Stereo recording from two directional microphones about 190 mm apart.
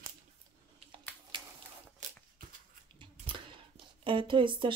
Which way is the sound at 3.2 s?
30° right (ahead or behind).